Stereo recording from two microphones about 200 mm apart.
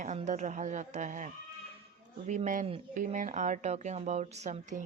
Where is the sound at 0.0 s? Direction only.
35° right (ahead or behind).